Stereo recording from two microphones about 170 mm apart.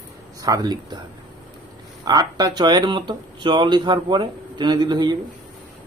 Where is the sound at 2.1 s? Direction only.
20° right (ahead or behind).